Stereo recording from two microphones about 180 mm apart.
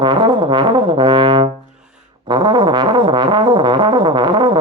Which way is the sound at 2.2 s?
25° right (ahead or behind).